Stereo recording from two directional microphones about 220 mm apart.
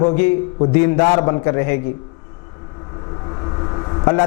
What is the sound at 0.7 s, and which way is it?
Speech, 10° left (ahead or behind).